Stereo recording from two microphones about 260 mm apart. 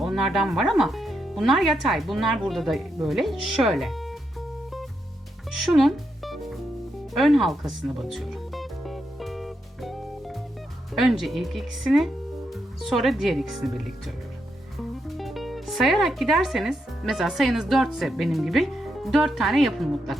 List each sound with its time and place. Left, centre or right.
0.0 s speech: centre
5.5 s music: centre
10.9 s speech: centre
15.2 s speech: centre